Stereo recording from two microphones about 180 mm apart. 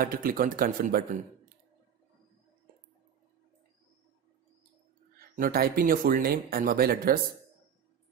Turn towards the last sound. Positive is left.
turn(degrees=-55)  # may be behind; listen again after turning